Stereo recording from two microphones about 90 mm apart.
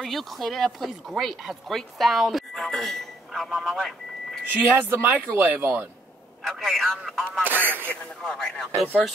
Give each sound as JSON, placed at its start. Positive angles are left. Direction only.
{"t": 0.0, "sound": "speech", "side_deg": 0}
{"t": 4.5, "sound": "speech", "side_deg": -20}
{"t": 6.4, "sound": "speech", "side_deg": 0}
{"t": 7.4, "sound": "speech", "side_deg": -20}
{"t": 8.2, "sound": "speech", "side_deg": 10}